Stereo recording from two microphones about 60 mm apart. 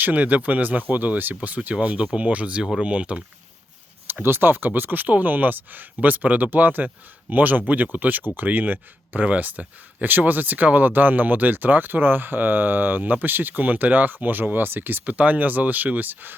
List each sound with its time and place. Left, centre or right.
0.0 s speech: right
4.0 s speech: right